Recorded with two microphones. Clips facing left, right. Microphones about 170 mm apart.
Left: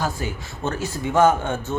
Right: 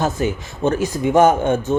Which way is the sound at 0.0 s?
20° right (ahead or behind).